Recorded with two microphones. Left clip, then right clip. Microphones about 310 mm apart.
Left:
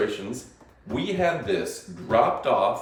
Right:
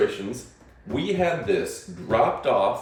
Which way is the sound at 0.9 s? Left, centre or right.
Centre.